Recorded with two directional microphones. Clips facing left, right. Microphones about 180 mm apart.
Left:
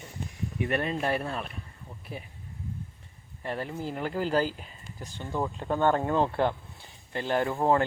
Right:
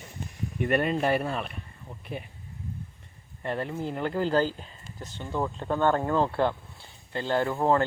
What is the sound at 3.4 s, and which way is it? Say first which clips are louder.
Speech: right 2 dB; 5° left (ahead or behind).